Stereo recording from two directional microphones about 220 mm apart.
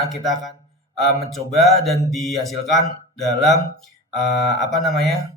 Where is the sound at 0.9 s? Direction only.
Centre (ahead or behind).